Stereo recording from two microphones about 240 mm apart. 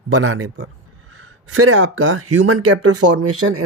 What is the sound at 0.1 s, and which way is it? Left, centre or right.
Speech, right.